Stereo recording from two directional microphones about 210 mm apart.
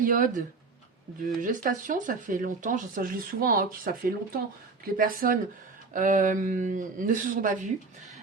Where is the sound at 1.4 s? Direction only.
40° right (ahead or behind).